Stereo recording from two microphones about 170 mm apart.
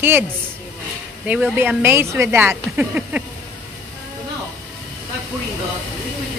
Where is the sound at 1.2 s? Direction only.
10° right (ahead or behind).